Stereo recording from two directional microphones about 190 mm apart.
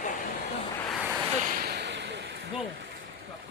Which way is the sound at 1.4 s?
50° right (ahead or behind).